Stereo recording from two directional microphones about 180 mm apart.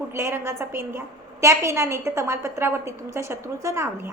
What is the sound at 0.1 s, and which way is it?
A woman's voice, 15° right (ahead or behind).